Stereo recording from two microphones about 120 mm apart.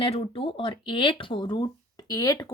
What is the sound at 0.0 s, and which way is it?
A woman's voice, 50° left (ahead or behind).